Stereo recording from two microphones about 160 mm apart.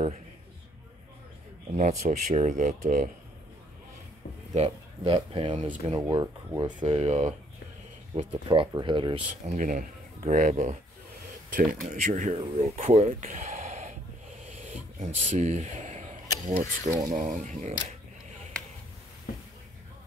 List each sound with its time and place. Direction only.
1.8 s speech: 45° right (ahead or behind)
4.6 s speech: 35° right (ahead or behind)
5.6 s speech: 45° right (ahead or behind)
5.9 s speech: 25° right (ahead or behind); by 7.3 s 40° right (ahead or behind)
8.5 s speech: 30° right (ahead or behind)
9.6 s speech: 55° right (ahead or behind)
12.4 s speech: 35° right (ahead or behind)
12.8 s a sound: 45° right (ahead or behind)
16.5 s speech: 55° right (ahead or behind)